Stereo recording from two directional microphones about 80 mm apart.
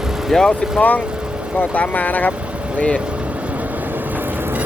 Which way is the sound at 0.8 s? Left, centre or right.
Centre.